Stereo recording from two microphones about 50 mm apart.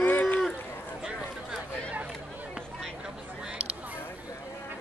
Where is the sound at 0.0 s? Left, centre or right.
Left.